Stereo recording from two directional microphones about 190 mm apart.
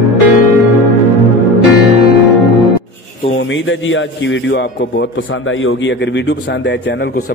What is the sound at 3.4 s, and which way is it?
A man's voice, 75° left (ahead or behind).